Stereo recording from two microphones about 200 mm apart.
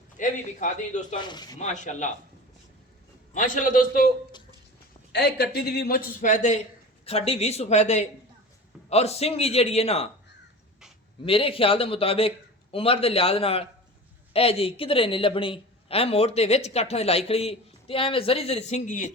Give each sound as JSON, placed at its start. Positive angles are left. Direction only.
{"t": 0.2, "sound": "a man's voice", "side_deg": 40}
{"t": 1.1, "sound": "a woman's voice", "side_deg": 20}
{"t": 1.5, "sound": "a man's voice", "side_deg": 35}
{"t": 3.3, "sound": "a man's voice", "side_deg": 40}
{"t": 5.1, "sound": "a man's voice", "side_deg": 55}
{"t": 11.3, "sound": "a woman's voice", "side_deg": 25}